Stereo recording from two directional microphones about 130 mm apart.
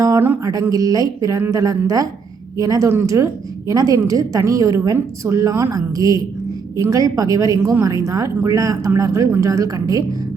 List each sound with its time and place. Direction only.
0.0 s a woman's voice: 20° right (ahead or behind)